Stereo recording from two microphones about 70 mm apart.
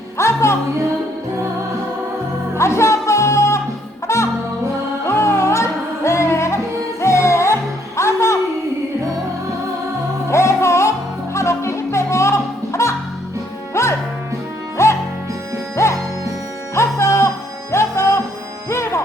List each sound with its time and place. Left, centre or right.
0.2 s music: left
2.6 s music: left
10.2 s music: left